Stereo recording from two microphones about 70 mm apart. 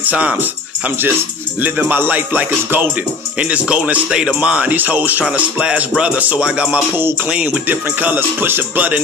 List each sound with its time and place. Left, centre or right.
0.0 s speech: centre
3.3 s music: centre
4.7 s speech: right
5.3 s music: centre
7.6 s speech: right